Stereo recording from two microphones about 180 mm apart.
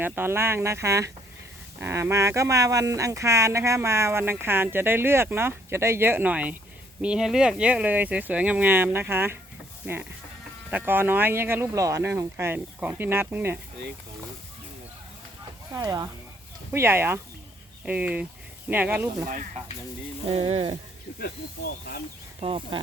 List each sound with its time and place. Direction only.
0.0 s speech: 10° right (ahead or behind)
15.7 s speech: 20° right (ahead or behind)
20.3 s speech: 35° right (ahead or behind)
22.4 s speech: 30° right (ahead or behind)